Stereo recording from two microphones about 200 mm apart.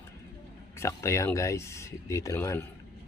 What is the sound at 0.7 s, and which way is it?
Speech, 15° left (ahead or behind).